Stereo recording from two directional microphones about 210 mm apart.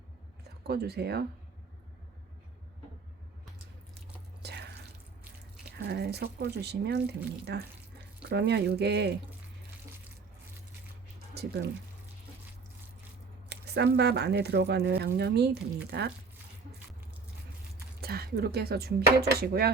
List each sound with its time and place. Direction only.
0.7 s speech: 50° right (ahead or behind)
4.4 s drip: 50° right (ahead or behind)
5.7 s speech: 50° right (ahead or behind)
11.3 s speech: 50° right (ahead or behind)
13.5 s speech: 55° right (ahead or behind)
18.0 s speech: 50° right (ahead or behind)